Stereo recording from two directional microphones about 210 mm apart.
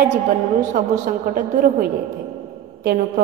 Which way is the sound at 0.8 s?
45° right (ahead or behind).